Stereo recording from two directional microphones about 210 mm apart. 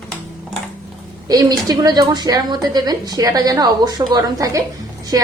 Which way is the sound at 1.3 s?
15° right (ahead or behind).